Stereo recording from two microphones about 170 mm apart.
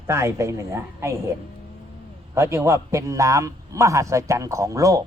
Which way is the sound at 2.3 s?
15° right (ahead or behind).